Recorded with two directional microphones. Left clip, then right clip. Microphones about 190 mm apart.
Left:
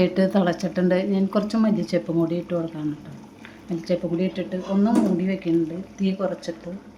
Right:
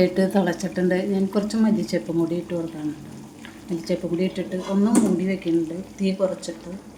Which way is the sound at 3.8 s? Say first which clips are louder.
Left 1 dB; 15° left (ahead or behind).